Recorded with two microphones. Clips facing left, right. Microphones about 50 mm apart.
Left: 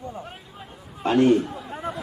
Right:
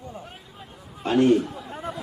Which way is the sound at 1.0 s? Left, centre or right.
Centre.